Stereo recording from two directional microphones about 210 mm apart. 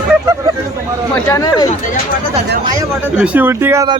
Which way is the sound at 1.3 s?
20° left (ahead or behind).